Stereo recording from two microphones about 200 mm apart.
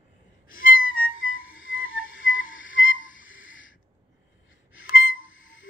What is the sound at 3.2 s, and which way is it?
Owl, 75° left (ahead or behind).